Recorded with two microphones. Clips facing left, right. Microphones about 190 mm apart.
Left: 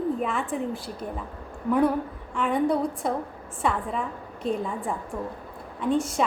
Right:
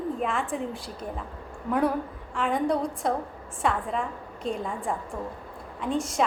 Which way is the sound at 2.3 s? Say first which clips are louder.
Left 2 dB; 5° left (ahead or behind).